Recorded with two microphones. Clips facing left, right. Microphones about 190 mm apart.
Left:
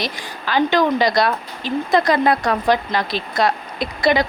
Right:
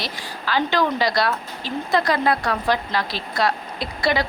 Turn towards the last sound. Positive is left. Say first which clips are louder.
# left 5 dB
turn(degrees=20)  # may be behind; listen again after turning